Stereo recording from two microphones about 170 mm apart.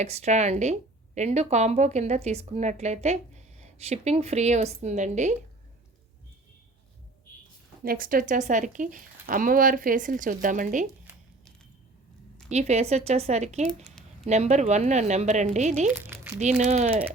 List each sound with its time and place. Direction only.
0.0 s speech: 40° right (ahead or behind)
7.9 s speech: 55° right (ahead or behind)
12.5 s speech: 40° right (ahead or behind)
15.9 s crumpling: 10° right (ahead or behind)
16.6 s speech: 40° right (ahead or behind)